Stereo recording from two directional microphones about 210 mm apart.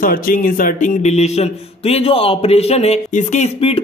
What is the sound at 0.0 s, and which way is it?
A man's voice, 40° left (ahead or behind).